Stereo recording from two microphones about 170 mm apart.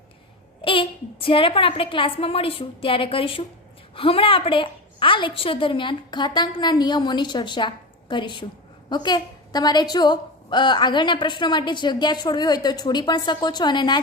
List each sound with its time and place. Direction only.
0.6 s a woman's voice: 30° left (ahead or behind)